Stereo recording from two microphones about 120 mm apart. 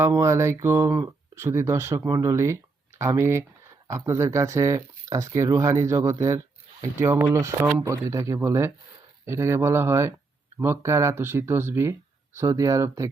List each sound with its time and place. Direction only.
0.0 s speech: 25° right (ahead or behind)